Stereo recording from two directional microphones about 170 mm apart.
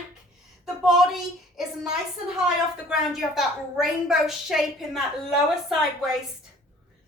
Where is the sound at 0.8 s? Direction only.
Centre (ahead or behind).